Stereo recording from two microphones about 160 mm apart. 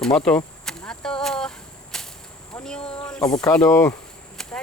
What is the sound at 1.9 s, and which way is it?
Whip, 5° left (ahead or behind).